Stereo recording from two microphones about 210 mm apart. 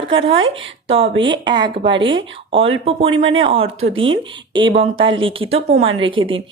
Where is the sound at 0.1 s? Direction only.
25° right (ahead or behind).